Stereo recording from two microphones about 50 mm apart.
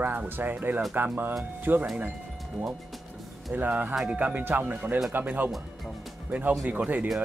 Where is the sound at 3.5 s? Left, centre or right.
Right.